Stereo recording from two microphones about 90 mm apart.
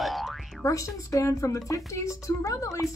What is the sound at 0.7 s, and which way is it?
A woman's voice, 35° left (ahead or behind).